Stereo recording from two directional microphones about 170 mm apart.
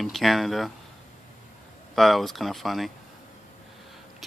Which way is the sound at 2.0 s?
Centre (ahead or behind).